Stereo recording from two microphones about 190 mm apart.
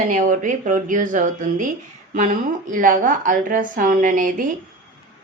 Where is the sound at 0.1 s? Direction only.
45° right (ahead or behind).